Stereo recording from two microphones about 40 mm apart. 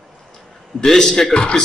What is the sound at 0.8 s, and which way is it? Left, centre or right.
Speech, centre.